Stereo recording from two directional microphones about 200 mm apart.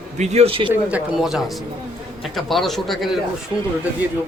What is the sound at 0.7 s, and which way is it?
Speech, 5° right (ahead or behind).